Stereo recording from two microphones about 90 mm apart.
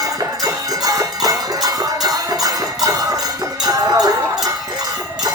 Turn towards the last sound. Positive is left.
turn(degrees=-40)  # may be behind; listen again after turning